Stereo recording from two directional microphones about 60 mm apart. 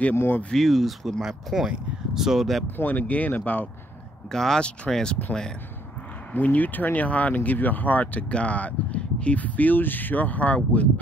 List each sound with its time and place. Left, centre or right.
0.5 s speech: centre
2.8 s speech: left
4.3 s speech: centre
6.3 s speech: left